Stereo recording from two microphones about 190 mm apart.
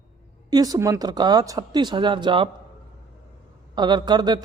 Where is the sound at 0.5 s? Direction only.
20° right (ahead or behind).